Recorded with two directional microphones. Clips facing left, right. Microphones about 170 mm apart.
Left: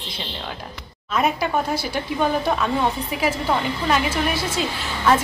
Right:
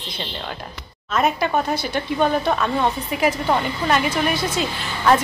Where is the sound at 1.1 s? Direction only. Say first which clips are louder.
Right 1 dB; 5° left (ahead or behind).